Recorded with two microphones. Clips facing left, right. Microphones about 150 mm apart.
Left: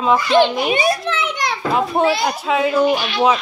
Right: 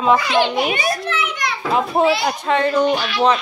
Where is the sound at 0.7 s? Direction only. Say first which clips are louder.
Left 3 dB; 25° left (ahead or behind).